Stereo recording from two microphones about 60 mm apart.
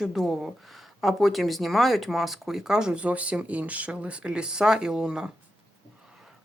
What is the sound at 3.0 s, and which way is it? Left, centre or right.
Speech, right.